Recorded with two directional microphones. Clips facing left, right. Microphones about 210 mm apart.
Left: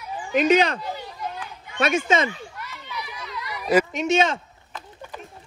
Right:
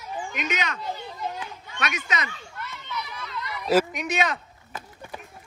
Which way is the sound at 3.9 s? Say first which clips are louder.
Left 6 dB; 25° left (ahead or behind).